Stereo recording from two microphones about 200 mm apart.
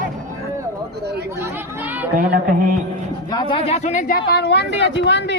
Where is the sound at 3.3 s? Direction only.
25° left (ahead or behind).